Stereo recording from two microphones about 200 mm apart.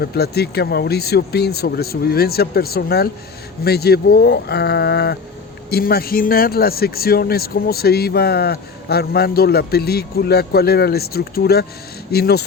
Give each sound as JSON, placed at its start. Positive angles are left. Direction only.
{"t": 0.0, "sound": "speech", "side_deg": 50}